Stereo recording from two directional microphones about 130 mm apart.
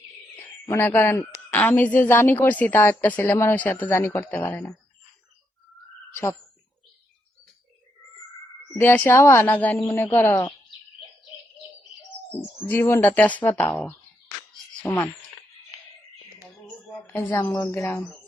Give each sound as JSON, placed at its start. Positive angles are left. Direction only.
{"t": 0.3, "sound": "a woman's voice", "side_deg": 20}
{"t": 8.7, "sound": "a woman's voice", "side_deg": 15}
{"t": 12.6, "sound": "a woman's voice", "side_deg": 15}
{"t": 17.1, "sound": "a woman's voice", "side_deg": 15}